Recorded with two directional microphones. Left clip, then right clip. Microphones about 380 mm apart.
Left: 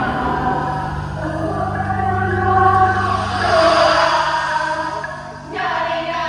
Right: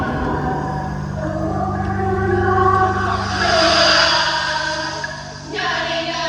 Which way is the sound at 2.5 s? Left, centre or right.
Centre.